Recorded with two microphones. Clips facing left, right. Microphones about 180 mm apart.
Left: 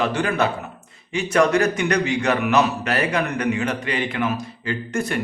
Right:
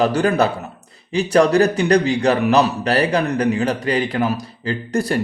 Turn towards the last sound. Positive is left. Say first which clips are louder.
# right 4 dB
turn(degrees=-35)  # may be behind; listen again after turning